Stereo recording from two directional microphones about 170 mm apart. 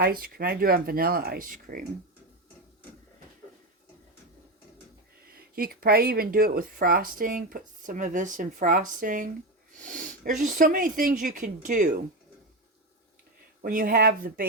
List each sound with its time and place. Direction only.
0.0 s speech: 65° right (ahead or behind)
5.5 s speech: 65° right (ahead or behind)
13.6 s speech: 55° right (ahead or behind)